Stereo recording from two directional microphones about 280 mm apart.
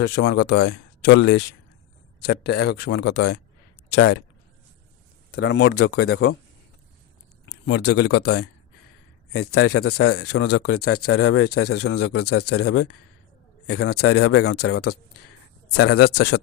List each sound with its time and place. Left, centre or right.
0.0 s speech: left
5.3 s speech: left
7.5 s speech: left
13.7 s speech: left
16.1 s speech: left